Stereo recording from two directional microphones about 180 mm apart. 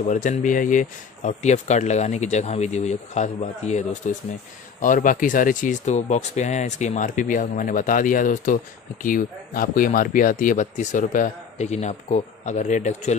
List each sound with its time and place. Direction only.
0.1 s speech: 45° left (ahead or behind)